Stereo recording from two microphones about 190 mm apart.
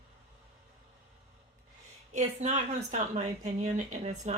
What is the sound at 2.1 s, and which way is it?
Speech, 40° right (ahead or behind).